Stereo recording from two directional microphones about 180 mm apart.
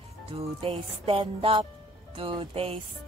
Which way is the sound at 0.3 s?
35° right (ahead or behind).